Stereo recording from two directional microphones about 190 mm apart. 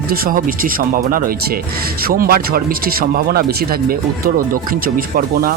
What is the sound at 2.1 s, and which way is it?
Speech, 55° right (ahead or behind).